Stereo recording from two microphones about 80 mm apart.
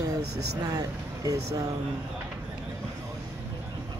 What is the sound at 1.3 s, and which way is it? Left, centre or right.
Speech, right.